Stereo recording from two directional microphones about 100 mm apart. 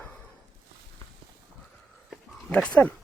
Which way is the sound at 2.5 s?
10° left (ahead or behind).